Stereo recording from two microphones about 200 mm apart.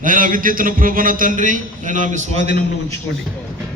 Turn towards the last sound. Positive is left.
turn(degrees=60)  # may be behind; listen again after turning